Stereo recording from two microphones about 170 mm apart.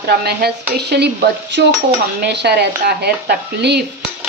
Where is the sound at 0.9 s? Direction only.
80° right.